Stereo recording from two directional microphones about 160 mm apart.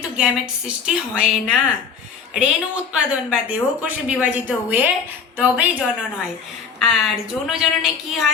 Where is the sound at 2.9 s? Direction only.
10° right (ahead or behind).